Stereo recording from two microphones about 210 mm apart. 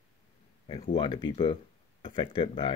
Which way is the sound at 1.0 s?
20° left (ahead or behind).